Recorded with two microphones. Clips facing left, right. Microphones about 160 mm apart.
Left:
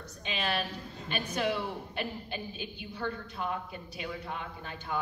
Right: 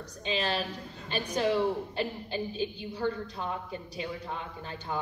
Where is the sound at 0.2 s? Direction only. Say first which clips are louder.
Right 3 dB; 30° right (ahead or behind).